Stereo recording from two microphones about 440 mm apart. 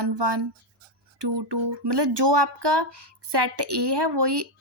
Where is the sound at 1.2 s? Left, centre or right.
Right.